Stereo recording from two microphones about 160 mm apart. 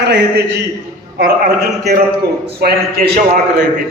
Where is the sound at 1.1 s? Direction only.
70° right (ahead or behind).